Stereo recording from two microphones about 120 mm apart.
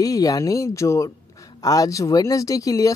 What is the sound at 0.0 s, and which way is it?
Speech, 30° left (ahead or behind).